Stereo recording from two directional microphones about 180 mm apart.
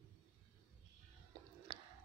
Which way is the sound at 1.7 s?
25° right (ahead or behind).